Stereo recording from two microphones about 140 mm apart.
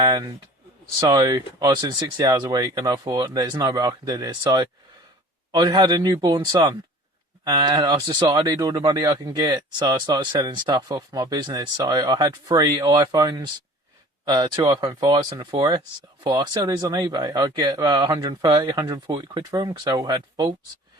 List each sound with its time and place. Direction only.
0.0 s speech: 25° right (ahead or behind)